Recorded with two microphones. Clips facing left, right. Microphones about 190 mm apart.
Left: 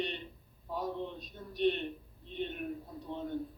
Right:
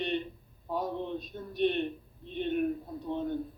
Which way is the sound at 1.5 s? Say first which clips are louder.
Right 2 dB; 55° right (ahead or behind).